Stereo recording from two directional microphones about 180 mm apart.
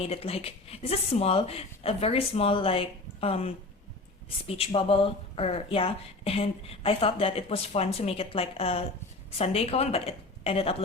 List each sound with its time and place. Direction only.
0.0 s speech: 35° left (ahead or behind)